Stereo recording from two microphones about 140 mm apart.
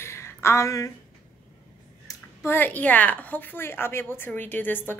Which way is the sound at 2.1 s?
15° left (ahead or behind).